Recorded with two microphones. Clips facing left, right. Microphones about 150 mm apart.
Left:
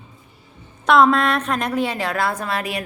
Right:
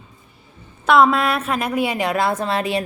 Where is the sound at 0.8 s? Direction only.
5° right (ahead or behind).